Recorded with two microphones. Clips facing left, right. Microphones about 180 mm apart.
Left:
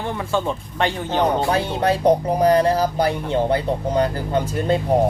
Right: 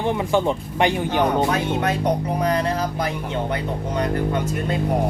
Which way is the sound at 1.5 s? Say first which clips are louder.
Left 2 dB; 30° left (ahead or behind).